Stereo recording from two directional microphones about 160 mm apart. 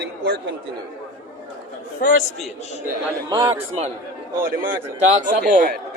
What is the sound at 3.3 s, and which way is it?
Speech, 25° right (ahead or behind).